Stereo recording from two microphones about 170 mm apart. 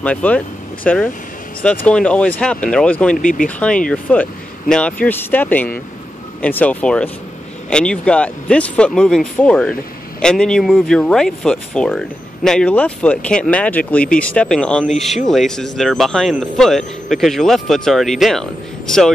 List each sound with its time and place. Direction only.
0.0 s speech: 10° left (ahead or behind)
3.2 s speech: 50° left (ahead or behind)
3.4 s speech: 5° left (ahead or behind)